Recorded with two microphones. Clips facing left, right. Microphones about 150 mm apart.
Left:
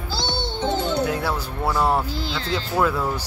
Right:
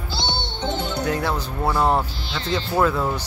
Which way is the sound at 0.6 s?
40° left (ahead or behind).